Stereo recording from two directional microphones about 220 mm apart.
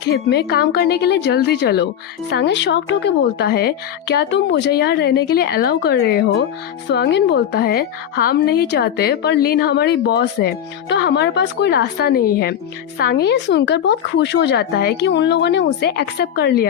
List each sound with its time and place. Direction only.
0.0 s a woman's voice: 50° left (ahead or behind)